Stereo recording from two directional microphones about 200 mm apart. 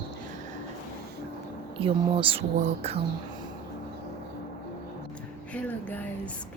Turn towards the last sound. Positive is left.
turn(degrees=10)  # may be behind; listen again after turning